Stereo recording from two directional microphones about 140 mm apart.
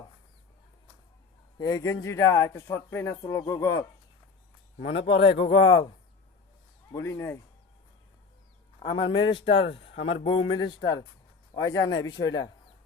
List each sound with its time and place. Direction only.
1.5 s speech: 30° left (ahead or behind)
5.0 s speech: 45° left (ahead or behind)
6.9 s speech: 20° left (ahead or behind)
8.9 s speech: 35° left (ahead or behind)
11.6 s speech: 25° left (ahead or behind)